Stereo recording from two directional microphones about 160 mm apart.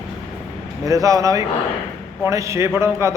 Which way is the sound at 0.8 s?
20° right (ahead or behind).